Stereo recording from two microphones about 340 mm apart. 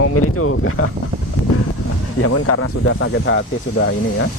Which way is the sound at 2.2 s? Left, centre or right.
Left.